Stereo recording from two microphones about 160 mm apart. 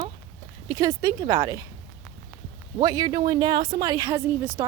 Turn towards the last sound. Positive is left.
turn(degrees=-20)  # may be behind; listen again after turning